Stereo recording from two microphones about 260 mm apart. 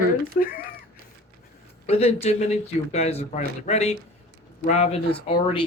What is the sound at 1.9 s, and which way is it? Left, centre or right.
Speech, left.